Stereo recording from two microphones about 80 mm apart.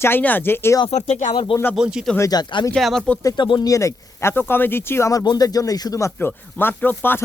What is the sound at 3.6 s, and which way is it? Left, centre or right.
Speech, left.